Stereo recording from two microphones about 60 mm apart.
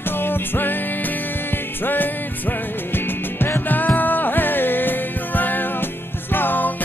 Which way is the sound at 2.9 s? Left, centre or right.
Left.